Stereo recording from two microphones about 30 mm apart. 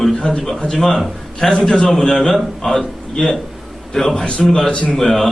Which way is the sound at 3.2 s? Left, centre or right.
Left.